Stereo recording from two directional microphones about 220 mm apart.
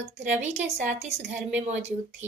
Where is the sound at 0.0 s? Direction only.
30° right (ahead or behind).